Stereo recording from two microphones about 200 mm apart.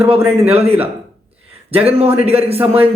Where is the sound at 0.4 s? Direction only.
30° right (ahead or behind).